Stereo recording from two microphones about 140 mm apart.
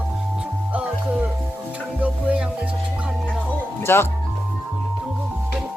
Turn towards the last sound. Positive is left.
turn(degrees=15)  # may be behind; listen again after turning